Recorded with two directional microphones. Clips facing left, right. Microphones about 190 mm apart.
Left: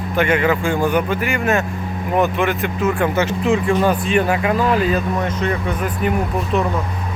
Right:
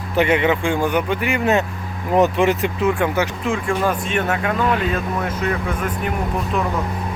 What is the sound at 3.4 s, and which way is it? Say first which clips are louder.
Speech: left 7 dB; 5° left (ahead or behind).